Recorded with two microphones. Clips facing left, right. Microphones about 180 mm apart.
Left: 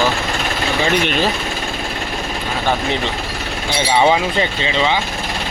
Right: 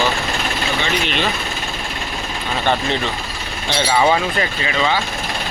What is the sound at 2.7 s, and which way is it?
Speech, 15° left (ahead or behind).